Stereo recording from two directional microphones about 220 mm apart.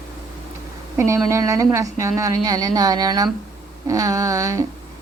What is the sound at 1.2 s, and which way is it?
A woman's voice, 15° right (ahead or behind).